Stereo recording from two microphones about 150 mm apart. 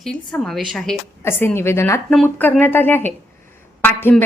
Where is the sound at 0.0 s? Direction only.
5° left (ahead or behind).